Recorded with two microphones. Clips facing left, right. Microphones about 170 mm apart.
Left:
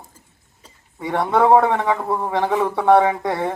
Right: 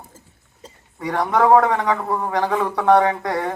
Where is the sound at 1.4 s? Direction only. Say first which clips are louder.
Even; 25° left (ahead or behind).